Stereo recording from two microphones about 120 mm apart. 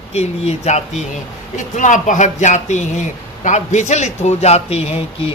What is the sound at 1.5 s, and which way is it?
A man's voice, 90° left.